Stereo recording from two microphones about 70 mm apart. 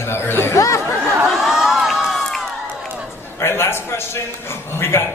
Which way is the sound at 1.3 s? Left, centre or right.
Centre.